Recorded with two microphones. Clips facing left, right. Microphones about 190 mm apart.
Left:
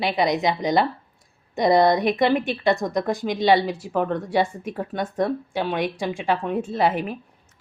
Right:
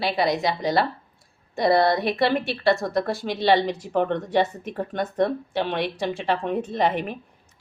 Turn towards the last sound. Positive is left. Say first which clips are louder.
# left 1 dB
turn(degrees=5)  # may be behind; listen again after turning